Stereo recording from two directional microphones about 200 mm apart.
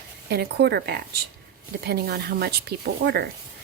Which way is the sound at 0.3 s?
55° right (ahead or behind).